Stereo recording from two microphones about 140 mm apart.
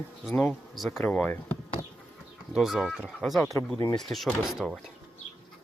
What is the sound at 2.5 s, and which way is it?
Speech, centre (ahead or behind).